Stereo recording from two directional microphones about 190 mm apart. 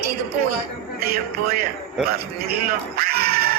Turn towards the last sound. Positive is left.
turn(degrees=-55)  # may be behind; listen again after turning